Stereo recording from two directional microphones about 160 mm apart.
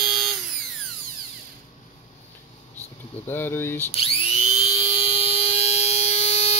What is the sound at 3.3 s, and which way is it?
Speech, 15° left (ahead or behind).